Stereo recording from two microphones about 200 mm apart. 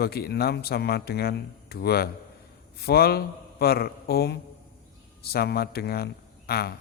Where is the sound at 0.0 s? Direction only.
50° left (ahead or behind).